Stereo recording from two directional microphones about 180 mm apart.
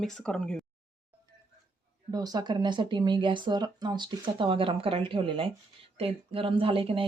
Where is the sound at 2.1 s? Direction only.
20° right (ahead or behind).